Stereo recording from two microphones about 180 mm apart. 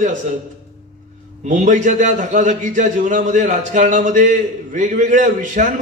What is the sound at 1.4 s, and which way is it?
A man's voice, 45° right (ahead or behind).